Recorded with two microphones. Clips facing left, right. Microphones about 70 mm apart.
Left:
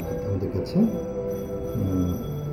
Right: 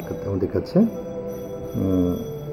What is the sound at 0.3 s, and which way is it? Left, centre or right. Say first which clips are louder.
Speech: right 8 dB; right.